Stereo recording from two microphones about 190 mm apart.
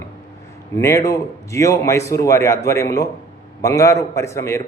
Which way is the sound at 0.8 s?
15° left (ahead or behind).